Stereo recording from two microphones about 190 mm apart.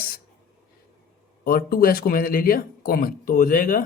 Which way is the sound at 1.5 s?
50° left (ahead or behind).